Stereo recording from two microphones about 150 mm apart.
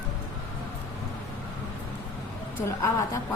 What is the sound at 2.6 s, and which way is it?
Speech, 20° left (ahead or behind).